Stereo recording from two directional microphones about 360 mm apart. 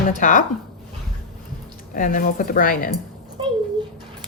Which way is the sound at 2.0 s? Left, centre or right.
Left.